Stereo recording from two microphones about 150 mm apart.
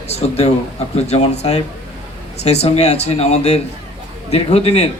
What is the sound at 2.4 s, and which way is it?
A man's voice, 45° left (ahead or behind).